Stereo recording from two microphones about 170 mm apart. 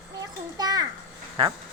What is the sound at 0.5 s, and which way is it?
Speech, 25° right (ahead or behind).